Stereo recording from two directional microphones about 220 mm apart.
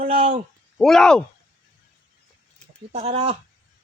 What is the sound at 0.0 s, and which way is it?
Speech, 25° right (ahead or behind).